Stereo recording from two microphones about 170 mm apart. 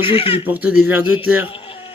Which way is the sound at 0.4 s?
10° right (ahead or behind).